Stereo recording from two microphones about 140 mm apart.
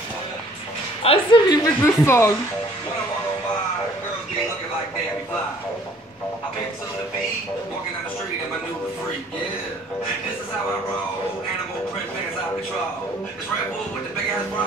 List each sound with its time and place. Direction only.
1.0 s a woman's voice: 40° left (ahead or behind)
1.5 s a woman's voice: 20° left (ahead or behind)